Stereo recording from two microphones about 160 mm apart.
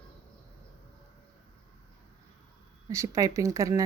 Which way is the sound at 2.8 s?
20° right (ahead or behind).